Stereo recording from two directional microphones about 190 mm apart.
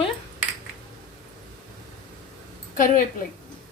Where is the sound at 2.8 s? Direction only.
45° left (ahead or behind).